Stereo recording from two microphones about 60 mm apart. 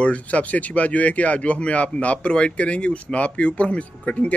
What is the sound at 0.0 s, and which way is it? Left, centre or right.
Speech, left.